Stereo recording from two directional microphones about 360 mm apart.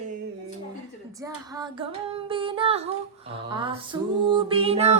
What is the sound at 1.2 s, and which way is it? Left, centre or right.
Music, centre.